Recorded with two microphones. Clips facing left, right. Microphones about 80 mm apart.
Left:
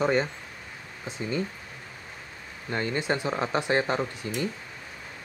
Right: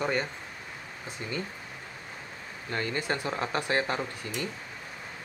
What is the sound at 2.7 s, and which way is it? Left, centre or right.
Speech, centre.